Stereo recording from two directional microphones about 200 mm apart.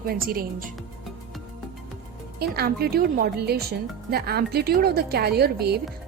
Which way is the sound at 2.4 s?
50° right (ahead or behind).